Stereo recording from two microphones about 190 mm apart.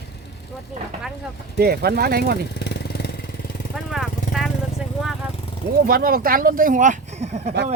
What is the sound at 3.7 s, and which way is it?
Vehicle, centre (ahead or behind).